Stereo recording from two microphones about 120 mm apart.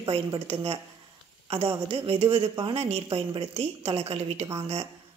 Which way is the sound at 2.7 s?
60° right (ahead or behind).